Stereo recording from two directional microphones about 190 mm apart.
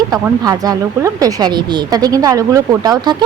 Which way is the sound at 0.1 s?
20° right (ahead or behind).